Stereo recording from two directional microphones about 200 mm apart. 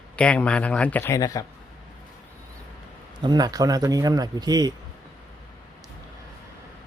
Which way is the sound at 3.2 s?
20° right (ahead or behind).